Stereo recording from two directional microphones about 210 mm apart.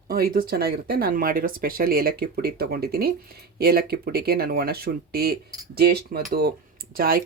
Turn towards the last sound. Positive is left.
turn(degrees=-45)  # may be behind; listen again after turning